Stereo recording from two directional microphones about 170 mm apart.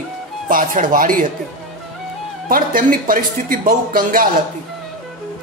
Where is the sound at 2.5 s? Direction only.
55° right (ahead or behind).